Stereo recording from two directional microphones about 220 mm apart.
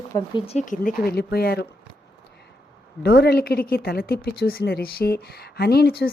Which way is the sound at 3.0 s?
45° left (ahead or behind).